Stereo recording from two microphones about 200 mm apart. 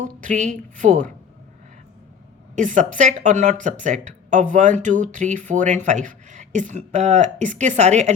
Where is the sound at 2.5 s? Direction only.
40° right (ahead or behind).